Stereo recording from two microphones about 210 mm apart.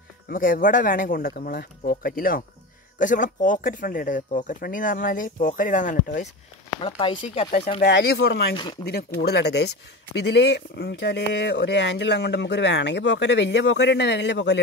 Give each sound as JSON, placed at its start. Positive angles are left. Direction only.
{"t": 0.3, "sound": "speech", "side_deg": 40}
{"t": 6.8, "sound": "speech", "side_deg": 25}
{"t": 7.8, "sound": "speech", "side_deg": 50}